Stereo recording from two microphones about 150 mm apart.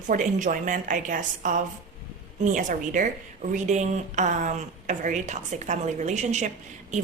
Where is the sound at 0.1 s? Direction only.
60° right (ahead or behind).